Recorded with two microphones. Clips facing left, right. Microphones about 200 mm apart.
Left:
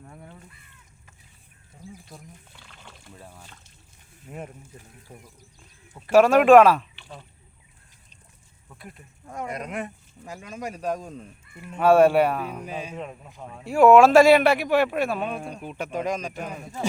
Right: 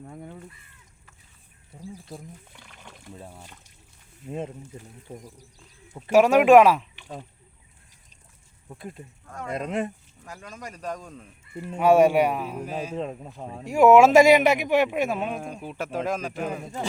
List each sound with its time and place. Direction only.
2.6 s water: 15° right (ahead or behind)
4.3 s speech: 25° right (ahead or behind)
5.1 s speech: 35° right (ahead or behind)
5.9 s speech: 10° right (ahead or behind)
8.7 s speech: 25° right (ahead or behind)
9.2 s speech: 15° left (ahead or behind)
9.5 s speech: 25° right (ahead or behind)
10.2 s speech: 10° left (ahead or behind)
11.5 s speech: 30° right (ahead or behind)
11.8 s speech: 15° right (ahead or behind)
13.0 s speech: 30° right (ahead or behind)
13.7 s speech: 10° right (ahead or behind)
15.2 s speech: 5° right (ahead or behind)